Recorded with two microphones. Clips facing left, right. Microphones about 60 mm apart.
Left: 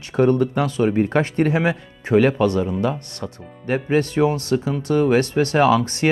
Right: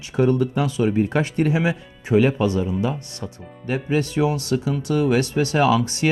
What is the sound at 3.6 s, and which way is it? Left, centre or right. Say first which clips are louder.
Speech: left 3 dB; left.